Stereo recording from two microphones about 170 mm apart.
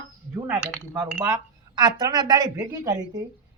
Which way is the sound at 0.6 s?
5° right (ahead or behind).